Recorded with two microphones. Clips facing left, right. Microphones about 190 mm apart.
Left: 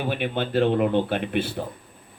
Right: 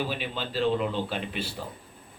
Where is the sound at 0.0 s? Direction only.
60° left (ahead or behind).